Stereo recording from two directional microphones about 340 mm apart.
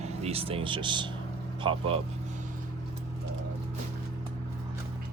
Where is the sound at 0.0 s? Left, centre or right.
Centre.